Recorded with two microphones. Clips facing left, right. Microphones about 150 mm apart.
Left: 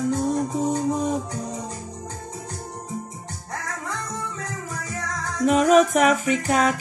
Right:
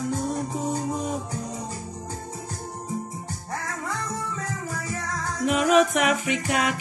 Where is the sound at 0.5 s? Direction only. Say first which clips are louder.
Left 4 dB; 40° left (ahead or behind).